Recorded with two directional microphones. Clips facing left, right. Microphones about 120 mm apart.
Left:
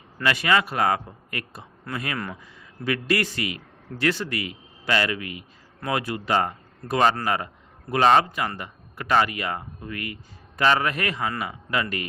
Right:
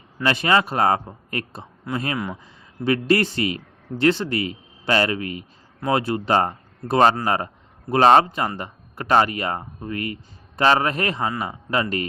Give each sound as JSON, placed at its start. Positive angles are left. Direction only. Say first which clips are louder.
{"t": 0.2, "sound": "speech", "louder": "right 3 dB", "side_deg": -30}
{"t": 2.1, "sound": "speech", "louder": "right 4 dB", "side_deg": -10}
{"t": 2.8, "sound": "a man's voice", "louder": "right 5 dB", "side_deg": -30}